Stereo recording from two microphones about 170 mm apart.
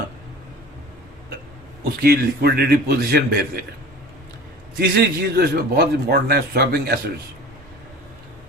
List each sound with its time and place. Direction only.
2.0 s a man's voice: 65° right (ahead or behind)
4.8 s a man's voice: 65° right (ahead or behind)